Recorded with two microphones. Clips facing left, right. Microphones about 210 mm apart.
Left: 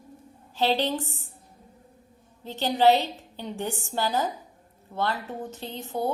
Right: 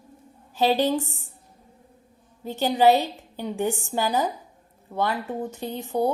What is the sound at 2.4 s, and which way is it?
Speech, 15° right (ahead or behind).